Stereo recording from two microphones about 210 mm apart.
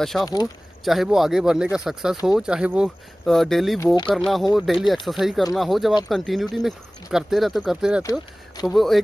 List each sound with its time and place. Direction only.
0.0 s speech: centre (ahead or behind)
3.8 s speech: 20° left (ahead or behind)
4.1 s speech: centre (ahead or behind)
8.0 s speech: 15° left (ahead or behind)
8.6 s speech: centre (ahead or behind)